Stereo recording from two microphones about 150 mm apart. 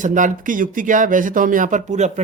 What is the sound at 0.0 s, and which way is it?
Speech, 55° right (ahead or behind).